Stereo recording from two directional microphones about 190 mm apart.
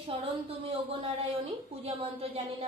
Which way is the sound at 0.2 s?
30° right (ahead or behind).